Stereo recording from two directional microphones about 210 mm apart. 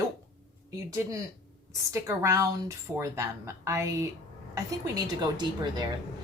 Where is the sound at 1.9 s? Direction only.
15° right (ahead or behind).